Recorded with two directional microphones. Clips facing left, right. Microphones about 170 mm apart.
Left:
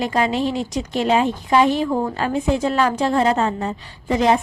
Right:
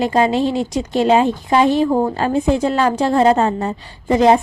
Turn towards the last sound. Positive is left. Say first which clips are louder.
# right 5 dB
turn(degrees=-35)  # may be behind; listen again after turning